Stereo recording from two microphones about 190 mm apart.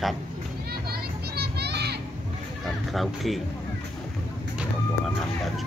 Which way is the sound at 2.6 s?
Centre (ahead or behind).